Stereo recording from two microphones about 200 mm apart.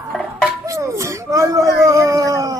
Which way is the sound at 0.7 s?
15° right (ahead or behind).